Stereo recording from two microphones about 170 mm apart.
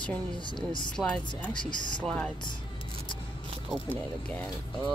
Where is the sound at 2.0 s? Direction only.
5° left (ahead or behind).